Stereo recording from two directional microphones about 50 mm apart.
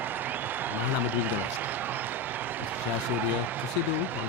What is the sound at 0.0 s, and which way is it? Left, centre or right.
Applause, right.